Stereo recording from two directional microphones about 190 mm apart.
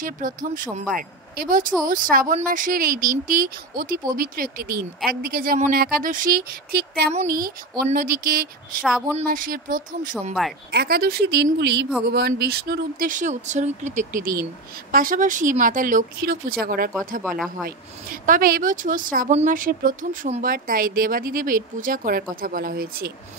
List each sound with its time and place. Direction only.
0.0 s speech: 45° right (ahead or behind)
8.8 s speech: 5° right (ahead or behind)
9.3 s speech: 45° right (ahead or behind)
17.2 s speech: centre (ahead or behind)
17.6 s speech: 50° right (ahead or behind)